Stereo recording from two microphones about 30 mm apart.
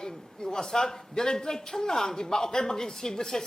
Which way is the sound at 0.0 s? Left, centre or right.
Left.